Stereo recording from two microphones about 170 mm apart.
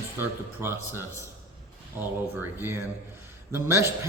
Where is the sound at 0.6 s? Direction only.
15° right (ahead or behind).